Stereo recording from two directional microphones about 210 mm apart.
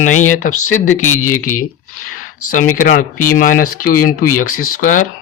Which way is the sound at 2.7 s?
40° left (ahead or behind).